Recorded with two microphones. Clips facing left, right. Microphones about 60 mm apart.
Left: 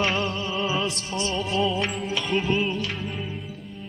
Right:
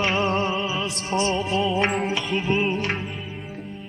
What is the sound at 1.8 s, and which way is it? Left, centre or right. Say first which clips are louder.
Music: right 5 dB; right.